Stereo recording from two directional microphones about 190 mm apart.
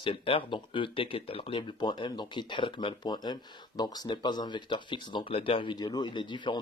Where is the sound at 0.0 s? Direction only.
30° left (ahead or behind).